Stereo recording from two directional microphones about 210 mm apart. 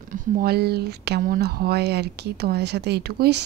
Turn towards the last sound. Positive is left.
turn(degrees=-50)  # may be behind; listen again after turning